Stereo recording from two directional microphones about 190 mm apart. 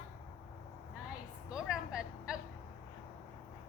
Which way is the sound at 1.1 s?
5° right (ahead or behind).